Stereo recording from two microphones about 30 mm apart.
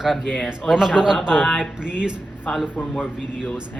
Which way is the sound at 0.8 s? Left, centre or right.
Centre.